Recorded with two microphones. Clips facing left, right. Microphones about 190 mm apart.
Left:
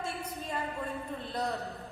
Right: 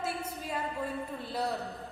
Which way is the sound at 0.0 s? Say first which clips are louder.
Right 2 dB; 5° right (ahead or behind).